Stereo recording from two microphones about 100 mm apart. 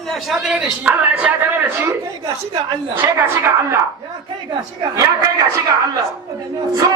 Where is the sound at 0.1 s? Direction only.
Centre (ahead or behind).